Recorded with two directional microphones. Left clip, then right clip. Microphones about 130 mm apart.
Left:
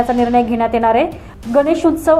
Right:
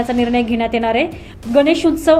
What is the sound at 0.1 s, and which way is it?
A woman's voice, 25° right (ahead or behind).